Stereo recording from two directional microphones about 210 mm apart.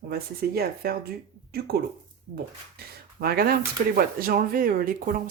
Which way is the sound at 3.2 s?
45° right (ahead or behind).